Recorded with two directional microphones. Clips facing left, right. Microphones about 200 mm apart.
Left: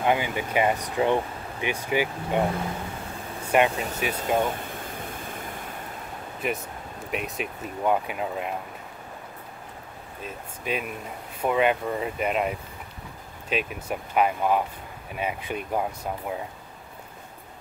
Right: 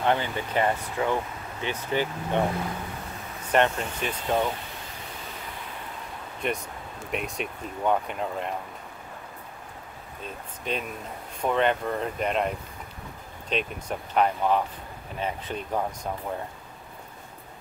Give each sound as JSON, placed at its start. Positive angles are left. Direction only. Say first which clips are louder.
{"t": 0.0, "sound": "speech", "louder": "left 1 dB", "side_deg": 10}
{"t": 3.4, "sound": "speech", "louder": "left 1 dB", "side_deg": 10}
{"t": 4.6, "sound": "waterfall", "louder": "left 5 dB", "side_deg": 50}
{"t": 6.4, "sound": "speech", "louder": "even", "side_deg": 5}
{"t": 10.2, "sound": "speech", "louder": "left 1 dB", "side_deg": 5}